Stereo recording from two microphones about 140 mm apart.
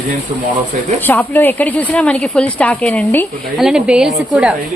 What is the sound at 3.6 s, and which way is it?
Speech, 5° right (ahead or behind).